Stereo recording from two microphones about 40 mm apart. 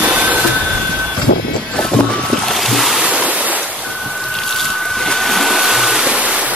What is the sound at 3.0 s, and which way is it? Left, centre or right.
Stream, right.